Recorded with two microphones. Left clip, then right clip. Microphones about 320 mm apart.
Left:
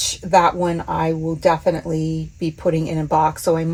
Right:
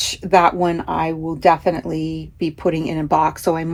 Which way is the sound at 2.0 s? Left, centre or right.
Right.